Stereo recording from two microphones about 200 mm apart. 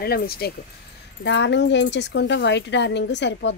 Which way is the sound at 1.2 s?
60° left (ahead or behind).